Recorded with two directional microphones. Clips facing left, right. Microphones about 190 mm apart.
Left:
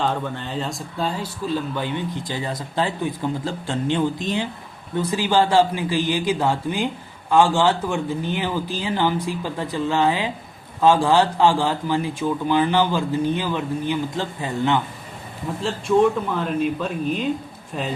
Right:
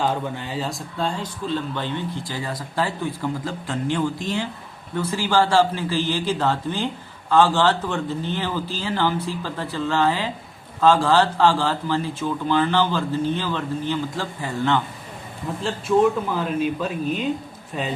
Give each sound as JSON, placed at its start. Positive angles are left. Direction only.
{"t": 0.0, "sound": "speech", "side_deg": -10}
{"t": 15.6, "sound": "speech", "side_deg": 0}